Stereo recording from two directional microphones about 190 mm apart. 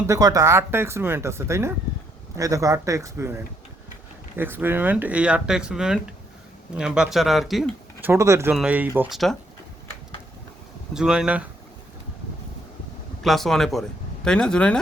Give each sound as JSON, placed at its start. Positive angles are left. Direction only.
{"t": 0.1, "sound": "speech", "side_deg": -20}
{"t": 8.1, "sound": "speech", "side_deg": -15}
{"t": 10.9, "sound": "speech", "side_deg": -5}
{"t": 13.2, "sound": "speech", "side_deg": 0}